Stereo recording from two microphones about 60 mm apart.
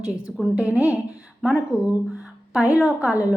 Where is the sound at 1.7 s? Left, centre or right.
Right.